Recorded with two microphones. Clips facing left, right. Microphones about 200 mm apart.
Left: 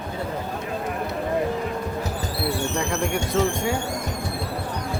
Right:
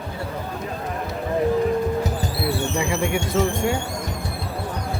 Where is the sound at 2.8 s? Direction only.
5° right (ahead or behind).